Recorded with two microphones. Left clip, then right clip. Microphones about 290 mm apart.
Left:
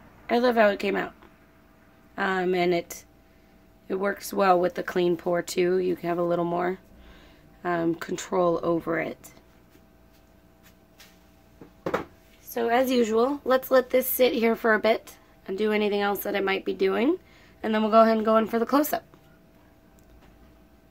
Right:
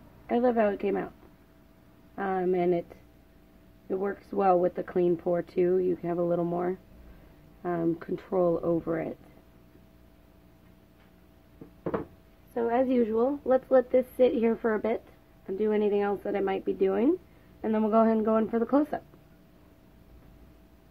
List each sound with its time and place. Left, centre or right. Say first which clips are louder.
0.3 s speech: left 4 dB; centre
2.1 s speech: left 3 dB; centre
12.5 s speech: left 3 dB; centre